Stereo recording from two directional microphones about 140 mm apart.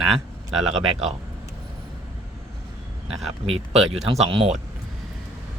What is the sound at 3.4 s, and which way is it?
Speech, 45° right (ahead or behind).